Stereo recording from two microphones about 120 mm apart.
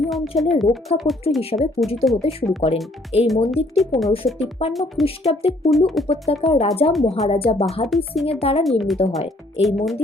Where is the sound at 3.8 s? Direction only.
Centre (ahead or behind).